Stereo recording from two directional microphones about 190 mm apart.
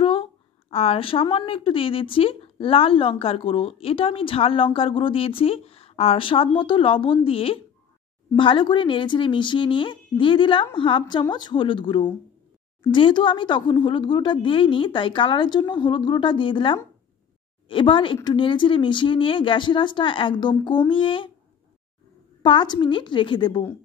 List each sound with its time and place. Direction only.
0.0 s a woman's voice: 30° left (ahead or behind)
22.4 s a woman's voice: 25° left (ahead or behind)